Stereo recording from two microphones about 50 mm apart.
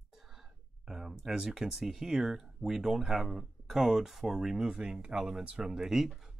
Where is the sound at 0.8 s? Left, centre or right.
Centre.